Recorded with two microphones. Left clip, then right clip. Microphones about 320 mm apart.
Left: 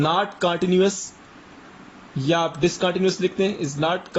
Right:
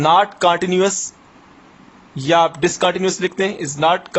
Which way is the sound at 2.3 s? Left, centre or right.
Right.